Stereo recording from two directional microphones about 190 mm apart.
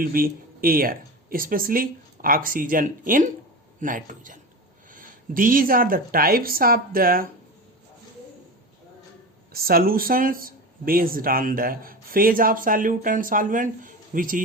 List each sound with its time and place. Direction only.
0.0 s speech: 50° right (ahead or behind)
9.5 s speech: 50° right (ahead or behind)